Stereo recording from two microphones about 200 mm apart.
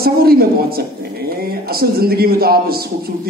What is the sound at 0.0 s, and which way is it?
A woman's voice, 50° right (ahead or behind).